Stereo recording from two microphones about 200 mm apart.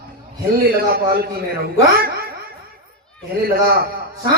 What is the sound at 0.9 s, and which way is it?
A man's voice, 50° right (ahead or behind).